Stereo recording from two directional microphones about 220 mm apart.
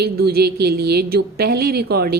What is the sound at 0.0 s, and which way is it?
Speech, 45° right (ahead or behind).